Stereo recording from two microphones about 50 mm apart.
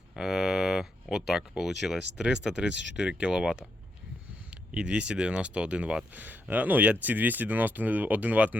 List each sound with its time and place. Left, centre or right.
0.2 s speech: centre
4.7 s speech: right
6.1 s speech: right